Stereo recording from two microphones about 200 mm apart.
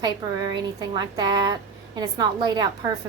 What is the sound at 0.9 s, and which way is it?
A woman's voice, 20° right (ahead or behind).